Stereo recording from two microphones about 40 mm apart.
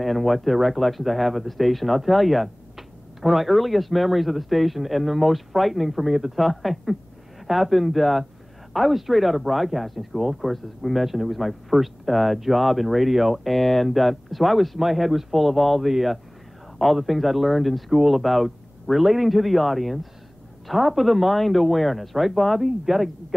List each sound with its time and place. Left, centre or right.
0.0 s speech: centre